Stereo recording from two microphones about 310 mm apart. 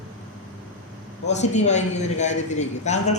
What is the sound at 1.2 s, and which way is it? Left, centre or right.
A man's voice, left.